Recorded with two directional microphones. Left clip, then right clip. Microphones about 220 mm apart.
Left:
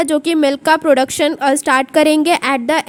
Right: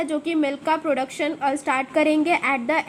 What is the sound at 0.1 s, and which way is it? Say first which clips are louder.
A woman's voice: left 9 dB; 55° left (ahead or behind).